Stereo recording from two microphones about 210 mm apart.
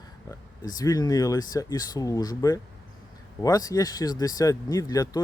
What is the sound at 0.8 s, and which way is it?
Speech, 15° left (ahead or behind).